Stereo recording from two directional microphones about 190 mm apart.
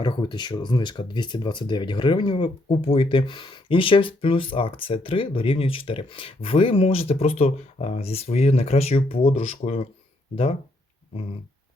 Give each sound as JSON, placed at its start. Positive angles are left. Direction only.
{"t": 0.0, "sound": "speech", "side_deg": 25}